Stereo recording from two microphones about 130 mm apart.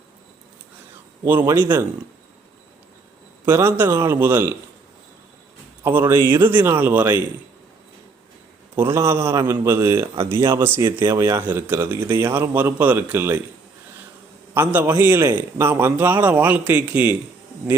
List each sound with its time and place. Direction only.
1.2 s a man's voice: 15° right (ahead or behind)
3.4 s a man's voice: 20° right (ahead or behind)
5.8 s a man's voice: 15° right (ahead or behind)
8.7 s a man's voice: 20° right (ahead or behind)
10.8 s speech: 35° right (ahead or behind)
11.1 s a man's voice: 20° right (ahead or behind)
14.5 s a man's voice: 15° right (ahead or behind)
15.3 s a man's voice: 30° right (ahead or behind)
15.6 s a man's voice: 20° right (ahead or behind)